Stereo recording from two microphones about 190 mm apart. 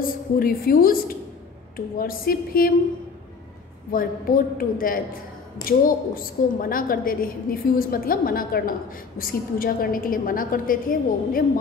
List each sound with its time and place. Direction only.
0.0 s a woman's voice: 50° left (ahead or behind)
3.9 s a woman's voice: 45° left (ahead or behind)